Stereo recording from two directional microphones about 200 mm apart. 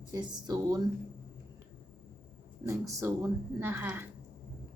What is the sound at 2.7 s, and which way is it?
A woman's voice, 15° right (ahead or behind).